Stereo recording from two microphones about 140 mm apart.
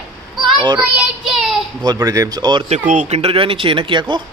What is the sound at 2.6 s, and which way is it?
Speech, 55° right (ahead or behind).